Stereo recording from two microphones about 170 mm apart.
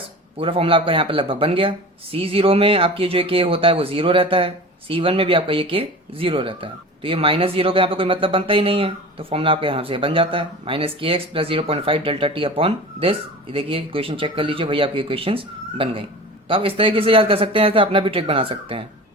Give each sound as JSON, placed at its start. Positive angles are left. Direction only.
{"t": 0.3, "sound": "speech", "side_deg": -35}